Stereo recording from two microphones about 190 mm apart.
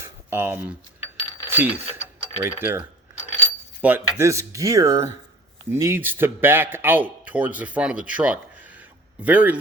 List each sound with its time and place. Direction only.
0.0 s a sound: 10° right (ahead or behind)
1.5 s speech: 10° right (ahead or behind)
3.8 s cutlery: 10° right (ahead or behind)
4.2 s speech: 15° right (ahead or behind)